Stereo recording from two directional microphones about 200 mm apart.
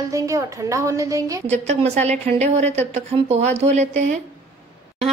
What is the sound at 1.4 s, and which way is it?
A woman's voice, 35° right (ahead or behind).